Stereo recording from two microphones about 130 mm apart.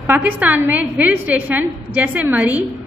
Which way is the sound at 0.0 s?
15° right (ahead or behind).